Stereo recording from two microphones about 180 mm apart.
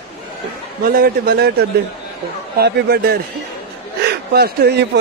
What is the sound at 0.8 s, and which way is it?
A man's voice, 55° right (ahead or behind).